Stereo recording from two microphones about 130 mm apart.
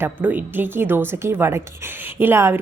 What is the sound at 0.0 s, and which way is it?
Speech, 15° right (ahead or behind).